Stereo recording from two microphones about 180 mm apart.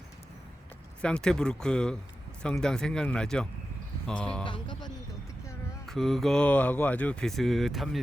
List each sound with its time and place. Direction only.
1.0 s speech: 5° left (ahead or behind)
4.4 s speech: 25° left (ahead or behind)
5.8 s speech: centre (ahead or behind)